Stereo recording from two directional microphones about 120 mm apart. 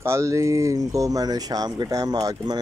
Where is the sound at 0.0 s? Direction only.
25° right (ahead or behind).